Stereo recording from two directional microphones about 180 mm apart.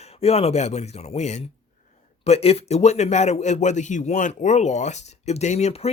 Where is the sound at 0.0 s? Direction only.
35° left (ahead or behind).